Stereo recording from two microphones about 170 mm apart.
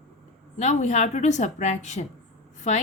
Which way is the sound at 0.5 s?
45° left (ahead or behind).